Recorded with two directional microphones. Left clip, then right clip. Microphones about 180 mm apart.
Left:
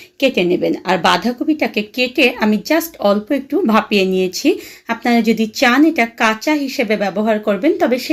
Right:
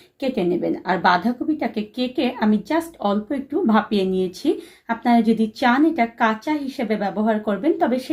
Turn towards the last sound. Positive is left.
turn(degrees=40)  # may be behind; listen again after turning